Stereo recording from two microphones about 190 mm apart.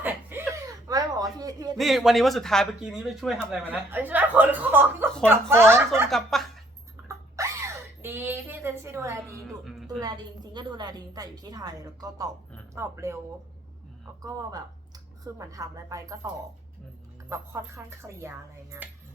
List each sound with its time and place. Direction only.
0.0 s a sound: 10° right (ahead or behind)
1.8 s speech: centre (ahead or behind)
6.1 s speech: centre (ahead or behind)
7.4 s sneeze: 15° right (ahead or behind)
8.0 s a sound: 10° right (ahead or behind)
9.6 s music: centre (ahead or behind)
10.0 s a woman's voice: 20° right (ahead or behind)
14.2 s a woman's voice: 20° right (ahead or behind)
17.2 s speech: 15° right (ahead or behind)